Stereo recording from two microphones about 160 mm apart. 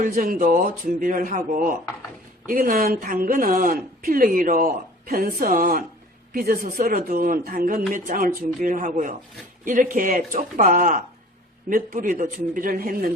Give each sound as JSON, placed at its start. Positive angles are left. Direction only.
{"t": 0.0, "sound": "a woman's voice", "side_deg": -60}